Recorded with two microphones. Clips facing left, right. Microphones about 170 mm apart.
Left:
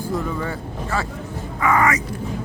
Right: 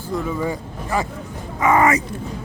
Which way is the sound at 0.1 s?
10° right (ahead or behind).